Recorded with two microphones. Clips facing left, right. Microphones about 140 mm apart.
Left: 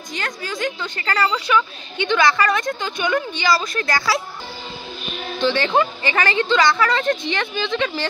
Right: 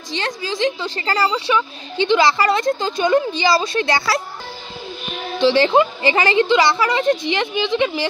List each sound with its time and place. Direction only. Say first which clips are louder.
0.1 s a woman's voice: right 4 dB; 30° right (ahead or behind)
5.5 s a woman's voice: right 5 dB; 25° right (ahead or behind)